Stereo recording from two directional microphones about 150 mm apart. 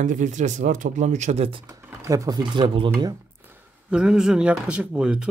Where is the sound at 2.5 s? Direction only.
30° right (ahead or behind).